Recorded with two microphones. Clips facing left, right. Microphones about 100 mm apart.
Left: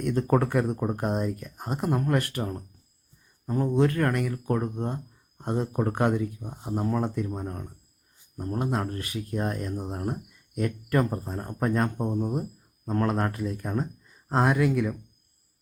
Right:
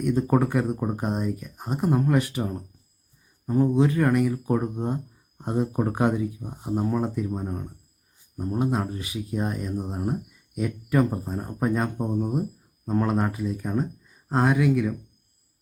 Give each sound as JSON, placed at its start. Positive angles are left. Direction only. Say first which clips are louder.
{"t": 0.0, "sound": "speech", "louder": "right 2 dB", "side_deg": -5}